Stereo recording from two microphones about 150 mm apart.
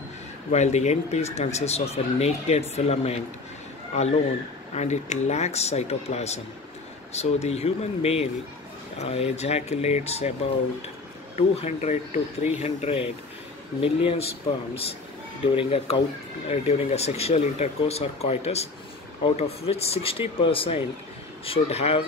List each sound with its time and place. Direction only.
0.5 s speech: 50° left (ahead or behind)
4.7 s speech: 50° left (ahead or behind)
11.5 s speech: 45° left (ahead or behind)
15.4 s speech: 40° left (ahead or behind)